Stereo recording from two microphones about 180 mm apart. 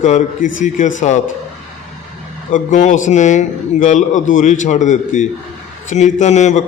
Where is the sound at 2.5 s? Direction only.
45° left (ahead or behind).